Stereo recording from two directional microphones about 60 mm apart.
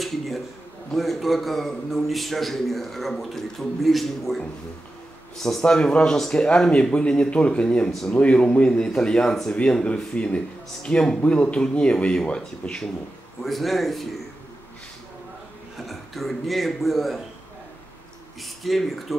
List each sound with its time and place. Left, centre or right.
0.0 s a sound: centre
0.9 s a man's voice: centre
5.4 s a man's voice: centre
9.6 s a man's voice: centre
13.4 s a man's voice: centre
15.8 s a man's voice: centre
18.4 s a man's voice: centre